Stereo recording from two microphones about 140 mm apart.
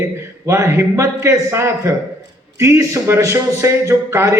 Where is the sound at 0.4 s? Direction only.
20° right (ahead or behind).